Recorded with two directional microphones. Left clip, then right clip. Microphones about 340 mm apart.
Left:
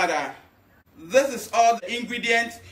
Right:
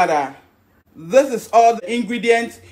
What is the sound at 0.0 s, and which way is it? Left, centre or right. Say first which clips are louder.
Speech: right 7 dB; centre.